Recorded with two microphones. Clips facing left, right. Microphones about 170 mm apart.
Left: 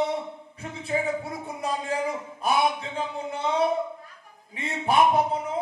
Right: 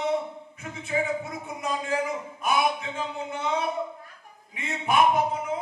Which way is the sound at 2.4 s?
30° left (ahead or behind).